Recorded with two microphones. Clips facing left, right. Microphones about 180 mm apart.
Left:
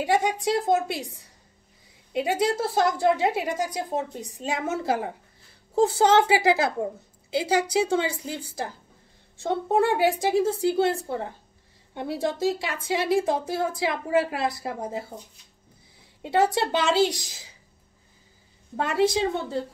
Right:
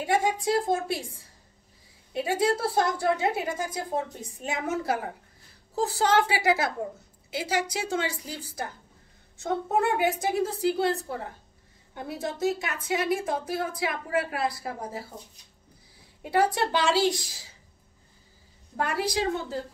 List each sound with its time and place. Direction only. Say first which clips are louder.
0.0 s speech: left 2 dB; 20° left (ahead or behind)
16.2 s speech: left 2 dB; 25° left (ahead or behind)
18.8 s speech: left 5 dB; 25° left (ahead or behind)